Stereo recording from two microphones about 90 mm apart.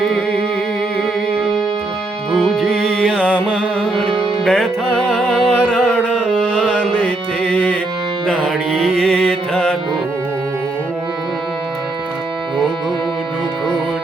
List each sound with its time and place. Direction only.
2.3 s music: 10° left (ahead or behind)
3.2 s music: 10° right (ahead or behind)
4.4 s music: centre (ahead or behind)
7.5 s music: 15° left (ahead or behind)
8.7 s music: 5° right (ahead or behind)